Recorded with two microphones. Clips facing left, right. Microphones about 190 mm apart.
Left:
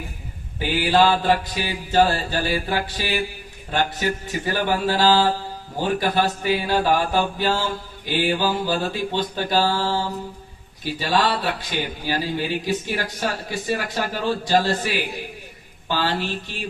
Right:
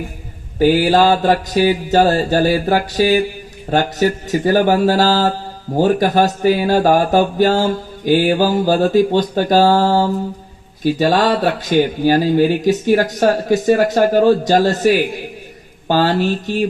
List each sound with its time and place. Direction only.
0.6 s speech: 40° right (ahead or behind)